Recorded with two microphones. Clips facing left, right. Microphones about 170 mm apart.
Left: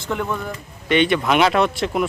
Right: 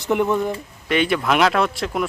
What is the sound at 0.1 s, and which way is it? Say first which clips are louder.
Speech: right 6 dB; 20° right (ahead or behind).